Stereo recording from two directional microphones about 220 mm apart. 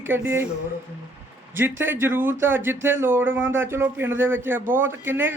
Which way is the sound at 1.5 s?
10° right (ahead or behind).